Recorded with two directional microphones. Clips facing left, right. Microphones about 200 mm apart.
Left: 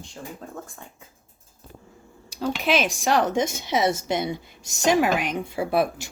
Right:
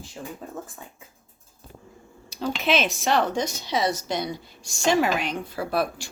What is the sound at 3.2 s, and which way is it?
A woman's voice, 25° left (ahead or behind).